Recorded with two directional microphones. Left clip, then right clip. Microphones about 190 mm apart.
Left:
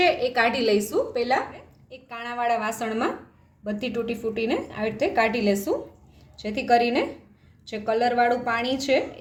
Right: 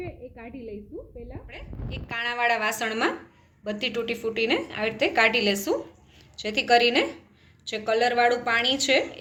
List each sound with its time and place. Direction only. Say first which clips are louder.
0.4 s a woman's voice: left 18 dB; 20° left (ahead or behind)